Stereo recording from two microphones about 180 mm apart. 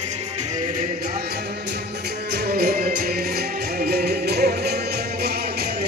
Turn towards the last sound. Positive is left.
turn(degrees=-60)  # may be behind; listen again after turning